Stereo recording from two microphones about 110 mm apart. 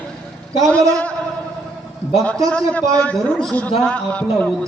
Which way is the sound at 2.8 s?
30° right (ahead or behind).